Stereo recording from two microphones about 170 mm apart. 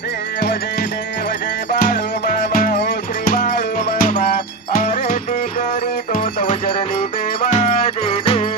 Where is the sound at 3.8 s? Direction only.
50° left (ahead or behind).